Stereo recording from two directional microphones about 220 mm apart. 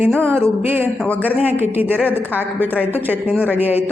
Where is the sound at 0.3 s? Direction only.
10° right (ahead or behind).